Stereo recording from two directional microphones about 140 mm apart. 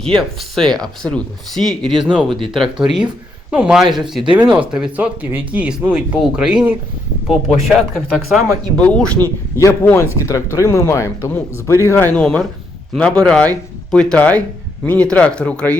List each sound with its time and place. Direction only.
0.0 s speech: centre (ahead or behind)
9.8 s speech: 20° left (ahead or behind)
12.1 s speech: 5° left (ahead or behind)